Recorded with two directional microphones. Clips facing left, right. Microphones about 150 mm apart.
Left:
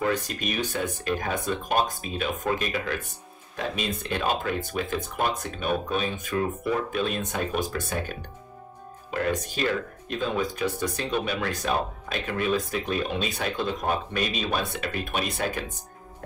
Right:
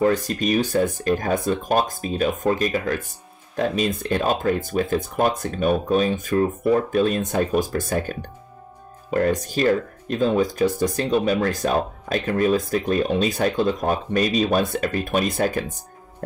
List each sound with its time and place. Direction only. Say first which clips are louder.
0.0 s speech: right 7 dB; 40° right (ahead or behind)